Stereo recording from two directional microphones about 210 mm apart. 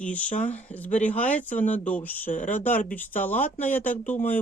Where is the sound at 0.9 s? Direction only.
35° left (ahead or behind).